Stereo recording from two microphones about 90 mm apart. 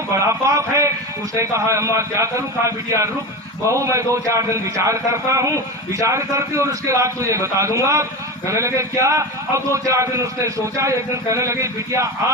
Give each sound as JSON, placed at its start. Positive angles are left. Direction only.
{"t": 0.1, "sound": "a man's voice", "side_deg": -35}